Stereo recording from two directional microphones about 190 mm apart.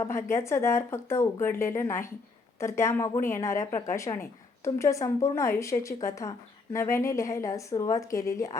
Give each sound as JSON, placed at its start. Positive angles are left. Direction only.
{"t": 0.0, "sound": "a woman's voice", "side_deg": 15}